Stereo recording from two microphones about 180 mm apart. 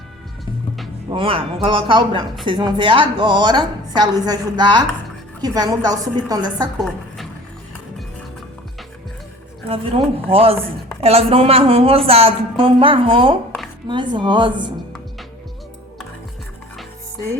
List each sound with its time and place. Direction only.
1.1 s a woman's voice: 30° right (ahead or behind)
6.7 s a woman's voice: centre (ahead or behind)
9.6 s a woman's voice: 30° right (ahead or behind)